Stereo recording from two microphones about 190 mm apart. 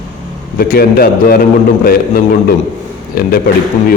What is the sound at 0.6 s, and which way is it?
A man's voice, 50° left (ahead or behind).